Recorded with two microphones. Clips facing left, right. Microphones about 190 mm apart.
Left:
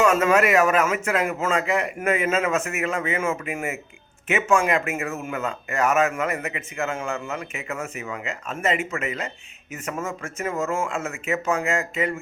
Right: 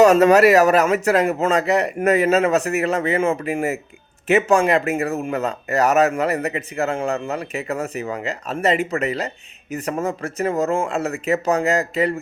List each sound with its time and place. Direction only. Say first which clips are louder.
0.0 s speech: right 7 dB; 35° right (ahead or behind)